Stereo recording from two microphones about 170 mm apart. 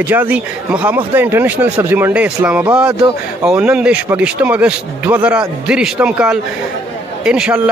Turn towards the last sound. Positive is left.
turn(degrees=-5)  # may be behind; listen again after turning